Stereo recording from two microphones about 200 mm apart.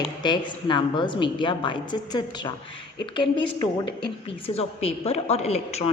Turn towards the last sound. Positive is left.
turn(degrees=30)  # may be behind; listen again after turning